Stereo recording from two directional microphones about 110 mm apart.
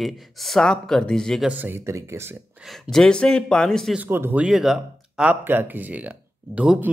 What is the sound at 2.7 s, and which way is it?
A woman's voice, 5° left (ahead or behind).